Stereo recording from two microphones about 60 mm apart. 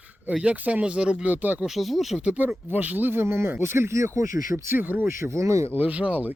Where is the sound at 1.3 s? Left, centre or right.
Right.